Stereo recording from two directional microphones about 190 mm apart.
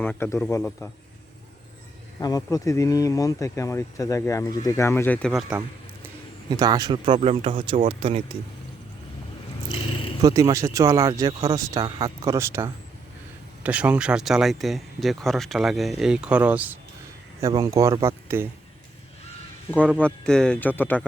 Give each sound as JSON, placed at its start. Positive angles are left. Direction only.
{"t": 0.0, "sound": "speech", "side_deg": 10}
{"t": 2.1, "sound": "speech", "side_deg": 20}
{"t": 5.5, "sound": "speech", "side_deg": -5}
{"t": 6.5, "sound": "speech", "side_deg": -20}
{"t": 10.2, "sound": "speech", "side_deg": -20}
{"t": 20.0, "sound": "speech", "side_deg": 5}